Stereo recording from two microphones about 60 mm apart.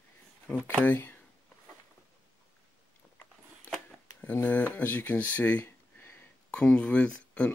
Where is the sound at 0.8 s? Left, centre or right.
Left.